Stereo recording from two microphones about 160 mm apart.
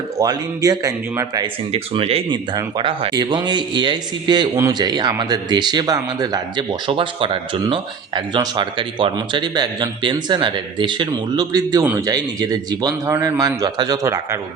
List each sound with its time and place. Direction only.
0.2 s speech: 25° right (ahead or behind)
1.7 s speech: 35° right (ahead or behind); by 14.3 s 20° right (ahead or behind)